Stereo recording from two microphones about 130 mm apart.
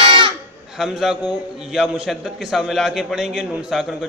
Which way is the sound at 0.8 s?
Centre (ahead or behind).